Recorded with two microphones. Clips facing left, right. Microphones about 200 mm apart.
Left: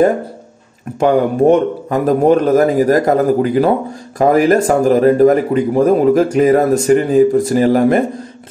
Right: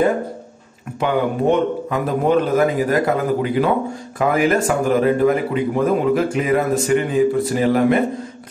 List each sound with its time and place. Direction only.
0.9 s speech: 45° left (ahead or behind)